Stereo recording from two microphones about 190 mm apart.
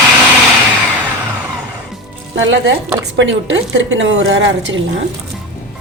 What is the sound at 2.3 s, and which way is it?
Speech, 75° right (ahead or behind).